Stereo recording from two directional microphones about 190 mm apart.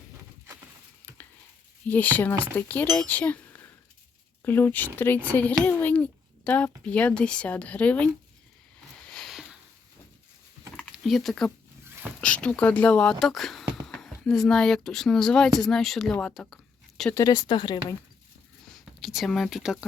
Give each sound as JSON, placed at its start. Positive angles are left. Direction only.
{"t": 1.9, "sound": "a child's voice", "side_deg": 10}
{"t": 9.0, "sound": "a sound", "side_deg": 0}
{"t": 10.9, "sound": "speech", "side_deg": 0}
{"t": 17.2, "sound": "speech", "side_deg": 20}
{"t": 18.9, "sound": "speech", "side_deg": 0}